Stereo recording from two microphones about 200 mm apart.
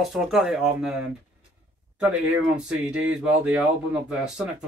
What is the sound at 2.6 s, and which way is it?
Speech, 5° right (ahead or behind).